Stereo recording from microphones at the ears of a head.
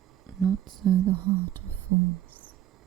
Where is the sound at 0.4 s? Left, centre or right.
Right.